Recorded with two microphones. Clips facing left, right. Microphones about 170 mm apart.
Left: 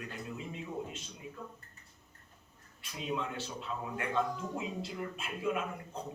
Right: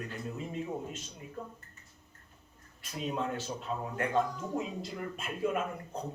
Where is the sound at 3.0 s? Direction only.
45° right (ahead or behind).